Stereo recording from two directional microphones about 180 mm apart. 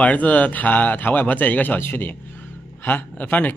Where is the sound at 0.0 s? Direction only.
10° left (ahead or behind).